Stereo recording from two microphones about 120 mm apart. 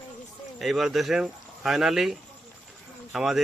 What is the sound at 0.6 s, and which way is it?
Speech, centre (ahead or behind).